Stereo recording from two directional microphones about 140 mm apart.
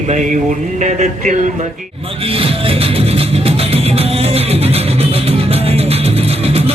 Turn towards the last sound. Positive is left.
turn(degrees=-45)  # may be behind; listen again after turning